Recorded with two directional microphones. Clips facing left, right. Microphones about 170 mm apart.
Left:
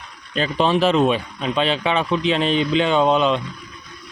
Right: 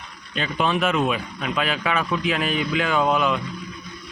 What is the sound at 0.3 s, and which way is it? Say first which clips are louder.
Speech: left 5 dB; 30° left (ahead or behind).